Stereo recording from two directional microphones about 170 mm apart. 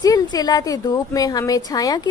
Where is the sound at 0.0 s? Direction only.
20° left (ahead or behind).